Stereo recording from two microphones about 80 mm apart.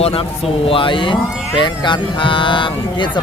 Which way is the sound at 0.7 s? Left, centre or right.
Left.